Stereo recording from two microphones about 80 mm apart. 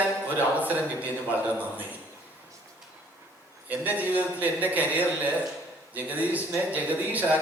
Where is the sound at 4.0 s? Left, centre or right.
Right.